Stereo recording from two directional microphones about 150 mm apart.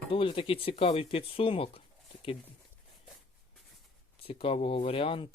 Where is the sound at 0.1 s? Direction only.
35° left (ahead or behind).